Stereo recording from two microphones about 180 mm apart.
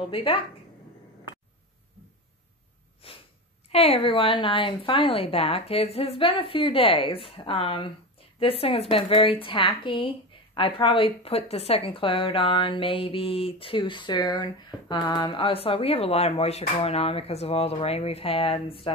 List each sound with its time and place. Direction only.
0.1 s speech: 30° left (ahead or behind)
3.0 s speech: 30° left (ahead or behind)